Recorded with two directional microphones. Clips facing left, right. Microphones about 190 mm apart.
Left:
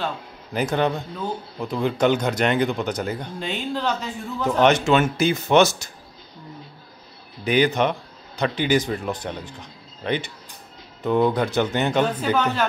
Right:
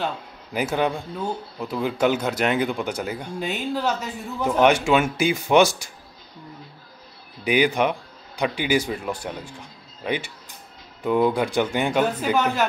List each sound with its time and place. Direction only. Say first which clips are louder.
0.0 s speech: even; 10° right (ahead or behind)
7.4 s speech: left 1 dB; 10° right (ahead or behind)